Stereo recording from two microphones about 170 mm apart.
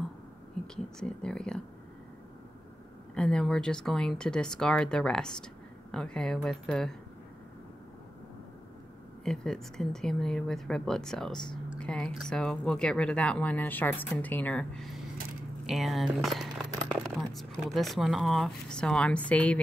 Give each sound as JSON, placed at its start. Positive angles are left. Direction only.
{"t": 0.9, "sound": "speech", "side_deg": 5}
{"t": 3.2, "sound": "speech", "side_deg": 5}
{"t": 9.2, "sound": "speech", "side_deg": 5}